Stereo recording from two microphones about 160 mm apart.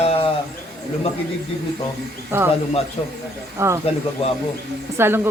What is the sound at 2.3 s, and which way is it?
Speech, 15° right (ahead or behind).